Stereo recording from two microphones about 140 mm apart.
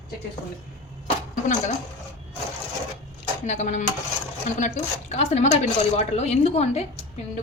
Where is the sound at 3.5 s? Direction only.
60° left (ahead or behind).